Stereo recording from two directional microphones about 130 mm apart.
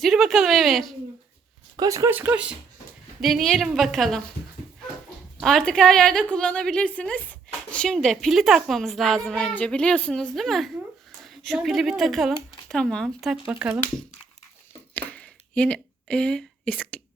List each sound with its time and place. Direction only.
0.0 s a woman's voice: centre (ahead or behind)
1.7 s speech: 30° right (ahead or behind)
2.1 s a woman's voice: 10° right (ahead or behind)
5.4 s a woman's voice: centre (ahead or behind)
13.5 s speech: 10° right (ahead or behind)
14.9 s a sound: 10° left (ahead or behind)